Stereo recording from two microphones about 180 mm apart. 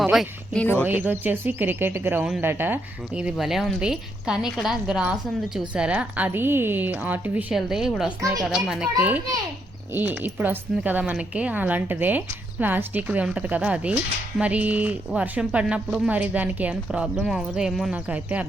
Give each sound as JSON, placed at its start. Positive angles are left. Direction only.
{"t": 0.0, "sound": "speech", "side_deg": 0}
{"t": 0.9, "sound": "speech", "side_deg": -10}
{"t": 8.2, "sound": "speech", "side_deg": -20}
{"t": 8.4, "sound": "speech", "side_deg": -5}